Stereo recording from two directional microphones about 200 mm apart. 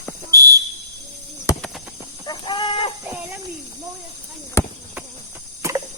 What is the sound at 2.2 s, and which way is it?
Chicken, 25° left (ahead or behind).